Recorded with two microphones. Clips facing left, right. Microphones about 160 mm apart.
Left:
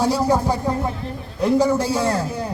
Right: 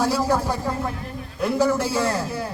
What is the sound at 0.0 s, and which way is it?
A man's voice, 15° left (ahead or behind).